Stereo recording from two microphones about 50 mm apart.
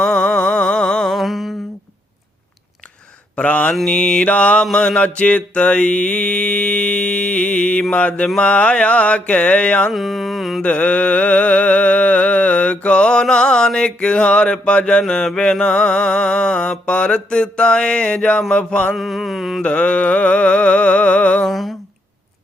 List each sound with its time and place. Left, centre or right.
0.0 s humming: centre
1.1 s mantra: centre
3.3 s mantra: left
3.8 s mantra: centre
9.9 s mantra: centre
10.6 s mantra: left
18.9 s mantra: centre
19.6 s mantra: left
21.4 s mantra: centre